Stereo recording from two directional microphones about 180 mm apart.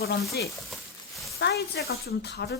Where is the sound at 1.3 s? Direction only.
70° left (ahead or behind).